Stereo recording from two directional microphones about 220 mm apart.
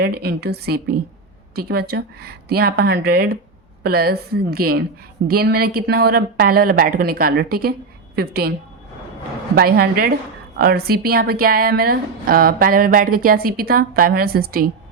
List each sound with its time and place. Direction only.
0.0 s a woman's voice: 45° right (ahead or behind)
9.6 s a woman's voice: 45° right (ahead or behind)